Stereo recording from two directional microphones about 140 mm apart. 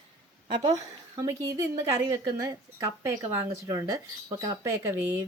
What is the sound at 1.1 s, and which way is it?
Speech, 25° right (ahead or behind).